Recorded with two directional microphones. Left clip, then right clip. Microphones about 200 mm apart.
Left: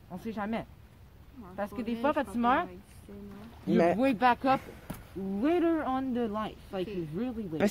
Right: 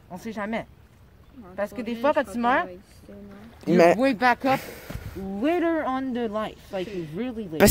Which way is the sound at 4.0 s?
30° right (ahead or behind).